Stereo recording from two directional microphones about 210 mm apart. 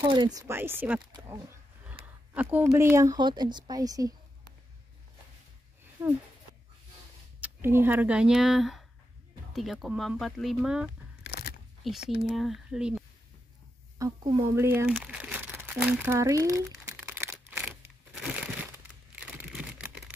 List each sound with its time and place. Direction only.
0.0 s speech: 20° right (ahead or behind)
2.3 s speech: 10° right (ahead or behind)
6.0 s speech: 10° right (ahead or behind)
7.3 s speech: 10° right (ahead or behind)
11.2 s a sound: 50° left (ahead or behind)
11.8 s speech: centre (ahead or behind)
13.9 s speech: 15° right (ahead or behind)
15.0 s crumpling: 5° right (ahead or behind)